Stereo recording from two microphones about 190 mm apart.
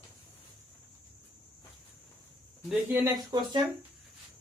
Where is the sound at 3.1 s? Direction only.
20° right (ahead or behind).